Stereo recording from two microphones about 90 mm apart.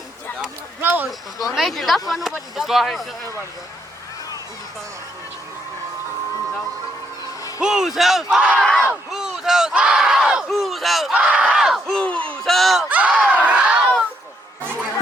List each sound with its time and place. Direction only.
0.8 s speech: 20° right (ahead or behind)
1.5 s speech: centre (ahead or behind)
7.6 s speech: 5° right (ahead or behind)
8.8 s crowd: 5° right (ahead or behind)
10.5 s battle cry: centre (ahead or behind)
11.1 s a sound: 15° right (ahead or behind)
11.9 s crowd: 10° left (ahead or behind)
12.5 s a sound: centre (ahead or behind)
12.9 s a sound: 15° right (ahead or behind)
14.6 s chatter: 25° right (ahead or behind)